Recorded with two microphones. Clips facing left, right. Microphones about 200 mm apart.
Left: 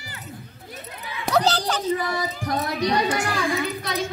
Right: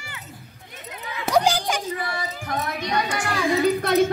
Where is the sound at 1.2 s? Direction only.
10° right (ahead or behind).